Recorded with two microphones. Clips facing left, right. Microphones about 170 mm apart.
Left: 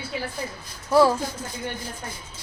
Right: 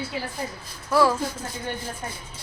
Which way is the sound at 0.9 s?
25° left (ahead or behind).